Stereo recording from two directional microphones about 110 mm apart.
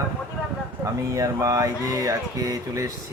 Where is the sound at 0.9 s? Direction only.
30° right (ahead or behind).